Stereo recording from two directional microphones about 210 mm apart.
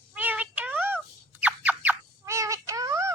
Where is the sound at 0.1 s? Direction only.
5° right (ahead or behind).